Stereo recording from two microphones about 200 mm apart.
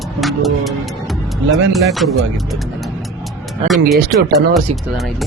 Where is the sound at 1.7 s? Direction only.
Centre (ahead or behind).